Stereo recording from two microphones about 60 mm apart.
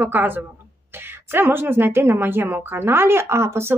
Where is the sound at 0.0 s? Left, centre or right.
Right.